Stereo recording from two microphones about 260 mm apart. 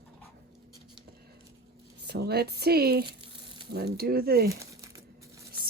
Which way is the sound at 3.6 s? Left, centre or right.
Right.